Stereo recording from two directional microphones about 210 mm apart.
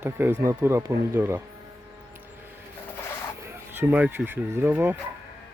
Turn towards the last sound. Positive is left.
turn(degrees=-10)  # may be behind; listen again after turning